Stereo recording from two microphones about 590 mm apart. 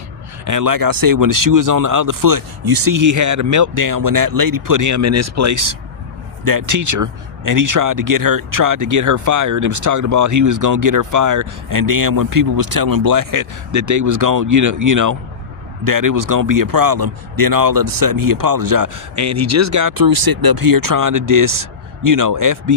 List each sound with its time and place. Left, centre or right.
0.4 s speech: right